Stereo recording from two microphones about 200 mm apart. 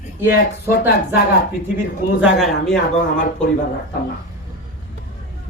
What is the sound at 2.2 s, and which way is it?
Speech, centre (ahead or behind).